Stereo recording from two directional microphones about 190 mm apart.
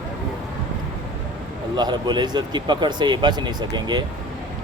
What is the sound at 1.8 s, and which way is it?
Speech, 20° right (ahead or behind).